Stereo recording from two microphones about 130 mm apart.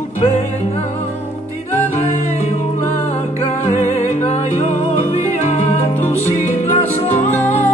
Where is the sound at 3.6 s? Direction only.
60° left (ahead or behind).